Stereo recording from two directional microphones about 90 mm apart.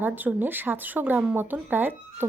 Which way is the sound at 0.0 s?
20° right (ahead or behind).